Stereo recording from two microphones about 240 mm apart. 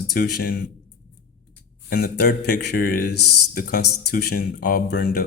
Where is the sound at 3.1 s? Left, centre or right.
Left.